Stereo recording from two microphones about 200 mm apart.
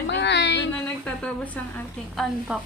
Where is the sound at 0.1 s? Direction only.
60° left (ahead or behind).